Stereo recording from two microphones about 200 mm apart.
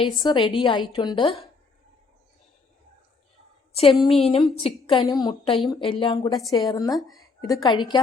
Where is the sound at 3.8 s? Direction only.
25° left (ahead or behind).